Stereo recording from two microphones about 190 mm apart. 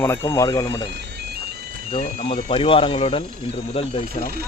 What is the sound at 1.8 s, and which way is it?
Speech, 35° left (ahead or behind).